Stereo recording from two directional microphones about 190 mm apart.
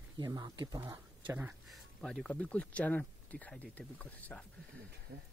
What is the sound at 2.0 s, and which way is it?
Speech, 5° left (ahead or behind).